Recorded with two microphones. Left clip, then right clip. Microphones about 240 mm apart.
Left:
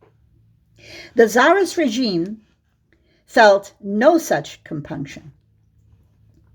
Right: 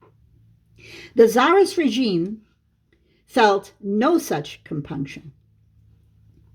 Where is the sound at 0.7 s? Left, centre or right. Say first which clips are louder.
Left 1 dB; centre.